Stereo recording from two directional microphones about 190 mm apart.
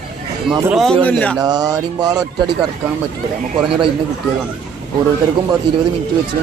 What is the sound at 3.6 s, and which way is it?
Speech, centre (ahead or behind).